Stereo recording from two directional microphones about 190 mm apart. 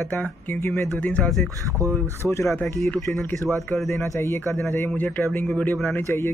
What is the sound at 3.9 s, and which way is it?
A man's voice, 15° left (ahead or behind).